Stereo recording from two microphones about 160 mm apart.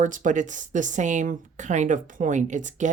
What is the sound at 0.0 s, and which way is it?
Speech, 55° right (ahead or behind).